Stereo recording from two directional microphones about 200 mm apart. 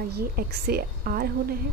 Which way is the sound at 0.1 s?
50° right (ahead or behind).